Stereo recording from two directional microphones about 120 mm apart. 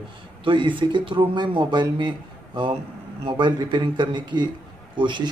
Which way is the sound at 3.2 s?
45° right (ahead or behind).